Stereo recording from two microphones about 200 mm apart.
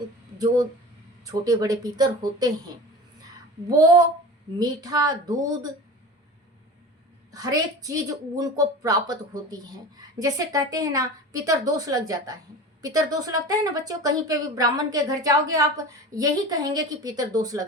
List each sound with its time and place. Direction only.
0.3 s speech: 20° right (ahead or behind)
3.8 s speech: 20° right (ahead or behind)
7.3 s a woman's voice: 20° right (ahead or behind)